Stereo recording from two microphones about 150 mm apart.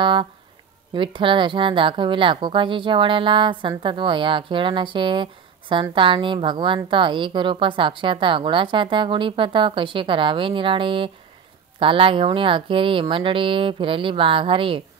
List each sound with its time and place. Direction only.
0.0 s a woman's voice: 35° right (ahead or behind)